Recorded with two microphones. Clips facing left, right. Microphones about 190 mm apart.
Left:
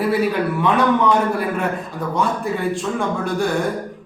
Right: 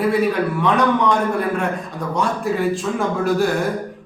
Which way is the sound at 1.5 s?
5° left (ahead or behind).